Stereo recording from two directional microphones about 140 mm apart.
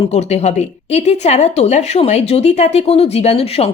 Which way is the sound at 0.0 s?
50° left (ahead or behind).